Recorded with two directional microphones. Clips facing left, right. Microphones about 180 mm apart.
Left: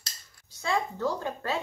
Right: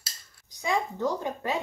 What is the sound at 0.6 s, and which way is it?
Speech, 15° right (ahead or behind).